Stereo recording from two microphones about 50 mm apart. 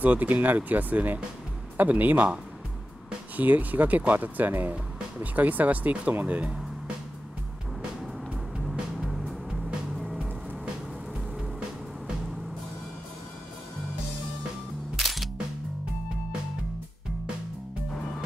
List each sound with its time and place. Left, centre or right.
0.0 s speech: right
3.3 s speech: right
8.6 s music: centre
15.0 s music: centre
17.9 s music: centre